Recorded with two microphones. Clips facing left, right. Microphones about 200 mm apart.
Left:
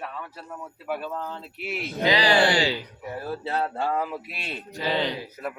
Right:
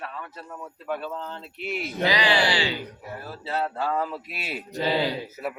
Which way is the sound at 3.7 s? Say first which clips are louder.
Left 1 dB; 25° left (ahead or behind).